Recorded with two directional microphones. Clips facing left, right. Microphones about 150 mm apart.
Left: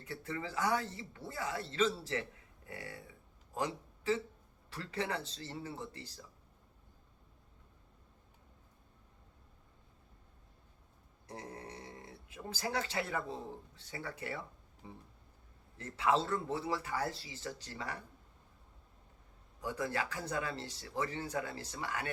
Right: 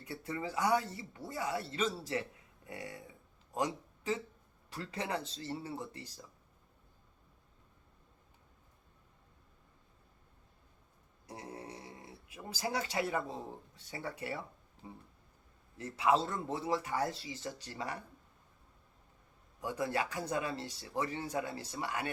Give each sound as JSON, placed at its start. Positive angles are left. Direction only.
{"t": 0.0, "sound": "a man's voice", "side_deg": -15}
{"t": 11.3, "sound": "speech", "side_deg": -10}
{"t": 15.8, "sound": "speech", "side_deg": -15}
{"t": 19.6, "sound": "speech", "side_deg": -15}